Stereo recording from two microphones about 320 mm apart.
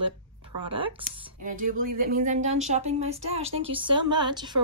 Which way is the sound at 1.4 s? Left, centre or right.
Right.